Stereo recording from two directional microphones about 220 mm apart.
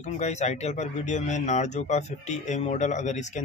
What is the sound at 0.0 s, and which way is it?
Speech, 30° left (ahead or behind).